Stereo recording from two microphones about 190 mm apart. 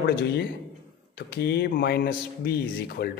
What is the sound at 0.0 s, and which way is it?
Speech, 55° left (ahead or behind).